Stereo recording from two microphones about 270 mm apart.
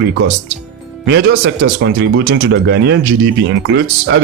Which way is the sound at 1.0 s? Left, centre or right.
Right.